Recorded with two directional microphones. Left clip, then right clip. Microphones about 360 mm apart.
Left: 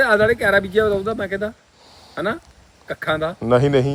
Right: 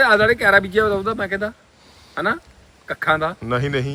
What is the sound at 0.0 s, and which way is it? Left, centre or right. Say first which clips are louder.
Speech: right 1 dB; centre.